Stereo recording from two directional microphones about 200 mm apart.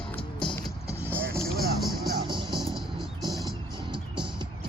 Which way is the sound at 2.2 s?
25° right (ahead or behind).